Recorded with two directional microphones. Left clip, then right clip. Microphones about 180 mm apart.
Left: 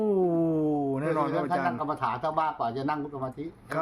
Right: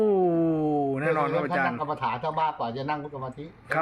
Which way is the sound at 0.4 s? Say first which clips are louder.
Right 2 dB; 20° left (ahead or behind).